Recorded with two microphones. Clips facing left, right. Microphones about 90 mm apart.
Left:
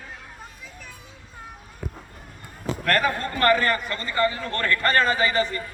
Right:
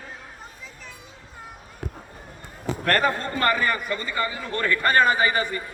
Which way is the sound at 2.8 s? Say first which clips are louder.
Right 1 dB; 30° right (ahead or behind).